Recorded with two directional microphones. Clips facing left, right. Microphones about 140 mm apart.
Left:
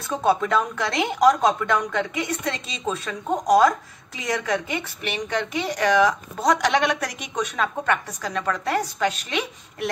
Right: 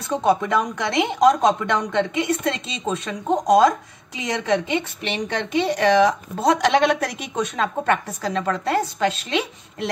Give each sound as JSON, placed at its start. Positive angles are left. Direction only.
{"t": 0.1, "sound": "a woman's voice", "side_deg": -15}